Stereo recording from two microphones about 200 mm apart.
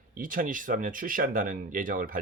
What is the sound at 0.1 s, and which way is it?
Speech, 45° right (ahead or behind).